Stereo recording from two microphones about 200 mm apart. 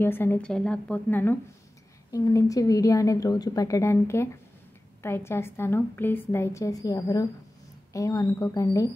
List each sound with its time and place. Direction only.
0.0 s a woman's voice: 10° left (ahead or behind)